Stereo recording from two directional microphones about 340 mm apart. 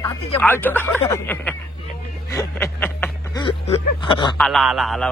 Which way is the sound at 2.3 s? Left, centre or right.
Centre.